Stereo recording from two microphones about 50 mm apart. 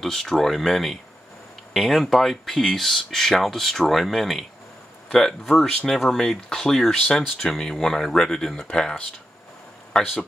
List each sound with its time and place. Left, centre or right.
0.0 s speech: centre